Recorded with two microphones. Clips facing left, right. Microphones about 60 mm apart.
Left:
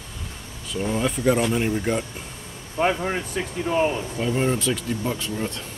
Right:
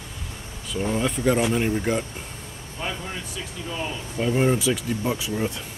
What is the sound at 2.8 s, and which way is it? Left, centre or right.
Speech, left.